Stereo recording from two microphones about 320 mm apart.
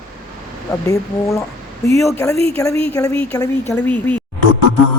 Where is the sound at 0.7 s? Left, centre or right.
Centre.